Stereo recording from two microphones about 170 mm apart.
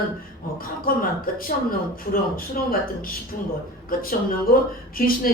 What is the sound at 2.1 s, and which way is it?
Speech, 60° left (ahead or behind).